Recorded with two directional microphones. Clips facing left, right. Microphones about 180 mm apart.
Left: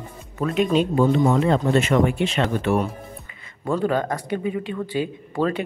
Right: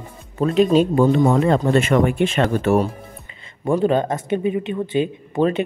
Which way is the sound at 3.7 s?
25° right (ahead or behind).